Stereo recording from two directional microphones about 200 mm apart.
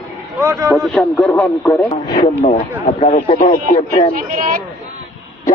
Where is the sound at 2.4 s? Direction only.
35° left (ahead or behind).